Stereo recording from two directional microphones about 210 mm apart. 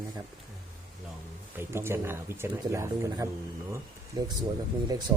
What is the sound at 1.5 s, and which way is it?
Speech, 10° right (ahead or behind).